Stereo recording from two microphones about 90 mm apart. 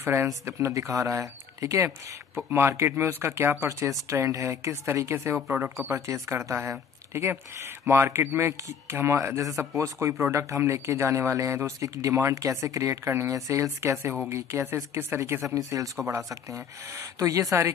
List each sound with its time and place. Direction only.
0.0 s speech: 30° right (ahead or behind)